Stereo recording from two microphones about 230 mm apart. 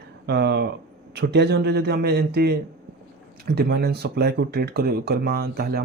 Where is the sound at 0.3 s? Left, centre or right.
Right.